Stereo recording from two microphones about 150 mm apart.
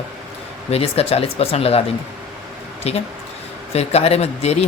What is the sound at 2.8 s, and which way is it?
Speech, 45° left (ahead or behind).